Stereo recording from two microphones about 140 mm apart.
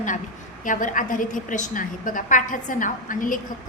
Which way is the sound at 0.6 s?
70° left (ahead or behind).